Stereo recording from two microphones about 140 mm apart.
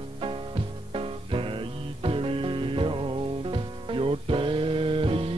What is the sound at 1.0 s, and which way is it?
Music, 40° right (ahead or behind).